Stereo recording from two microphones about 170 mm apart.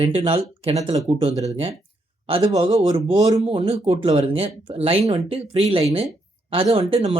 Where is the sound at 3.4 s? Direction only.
35° right (ahead or behind).